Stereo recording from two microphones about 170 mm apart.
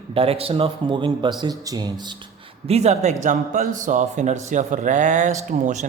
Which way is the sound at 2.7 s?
40° right (ahead or behind).